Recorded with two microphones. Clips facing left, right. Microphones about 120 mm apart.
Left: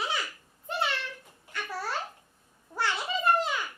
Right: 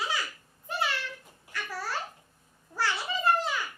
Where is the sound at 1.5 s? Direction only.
25° left (ahead or behind).